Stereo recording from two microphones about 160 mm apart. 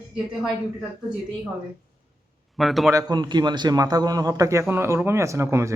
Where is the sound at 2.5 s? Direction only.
Centre (ahead or behind).